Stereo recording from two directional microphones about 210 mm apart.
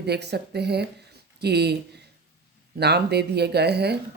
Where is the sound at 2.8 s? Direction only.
50° right (ahead or behind).